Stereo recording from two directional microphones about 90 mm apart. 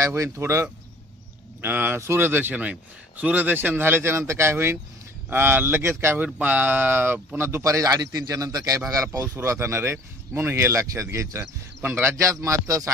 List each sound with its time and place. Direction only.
0.0 s a man's voice: 30° right (ahead or behind)
6.2 s speech: 15° right (ahead or behind)
12.2 s speech: 35° right (ahead or behind)